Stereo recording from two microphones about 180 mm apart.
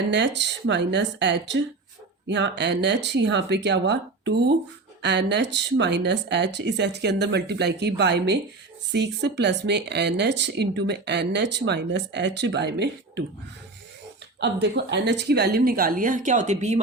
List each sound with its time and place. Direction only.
0.1 s speech: 75° right (ahead or behind)
14.3 s a woman's voice: 70° right (ahead or behind); by 16.8 s 40° right (ahead or behind)